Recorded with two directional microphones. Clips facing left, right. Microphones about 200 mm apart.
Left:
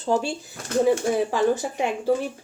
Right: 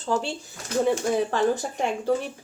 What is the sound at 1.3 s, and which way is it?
Speech, 5° left (ahead or behind).